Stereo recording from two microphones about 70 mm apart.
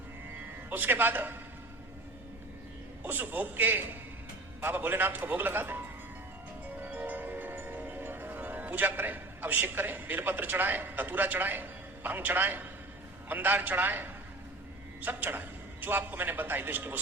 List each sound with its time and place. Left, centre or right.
0.7 s a man's voice: right
3.0 s a man's voice: right
6.8 s music: right
13.2 s a man's voice: right